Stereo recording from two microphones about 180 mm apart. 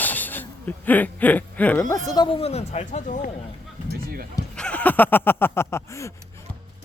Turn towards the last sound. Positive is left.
turn(degrees=15)  # may be behind; listen again after turning